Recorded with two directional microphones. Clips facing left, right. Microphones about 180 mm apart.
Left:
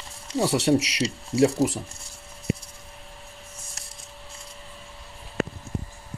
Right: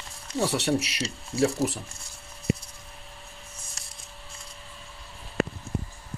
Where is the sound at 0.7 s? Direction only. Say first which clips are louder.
Left 6 dB; 15° left (ahead or behind).